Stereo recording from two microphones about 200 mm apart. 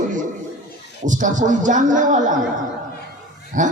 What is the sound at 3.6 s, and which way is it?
Speech, 40° right (ahead or behind).